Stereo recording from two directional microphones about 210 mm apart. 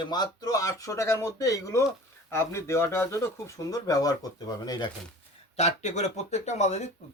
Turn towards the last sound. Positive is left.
turn(degrees=30)  # may be behind; listen again after turning